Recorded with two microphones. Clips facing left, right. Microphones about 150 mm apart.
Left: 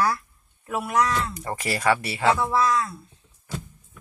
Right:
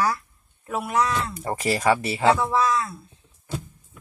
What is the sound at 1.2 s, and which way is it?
Speech, 25° right (ahead or behind).